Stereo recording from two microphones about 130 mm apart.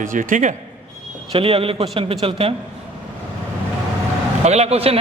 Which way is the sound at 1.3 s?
45° right (ahead or behind).